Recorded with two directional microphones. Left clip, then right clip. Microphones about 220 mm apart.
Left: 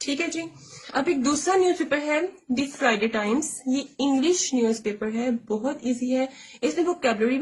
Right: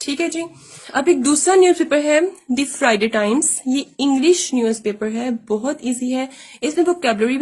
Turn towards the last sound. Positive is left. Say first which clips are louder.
# right 6 dB
turn(degrees=-45)  # may be behind; listen again after turning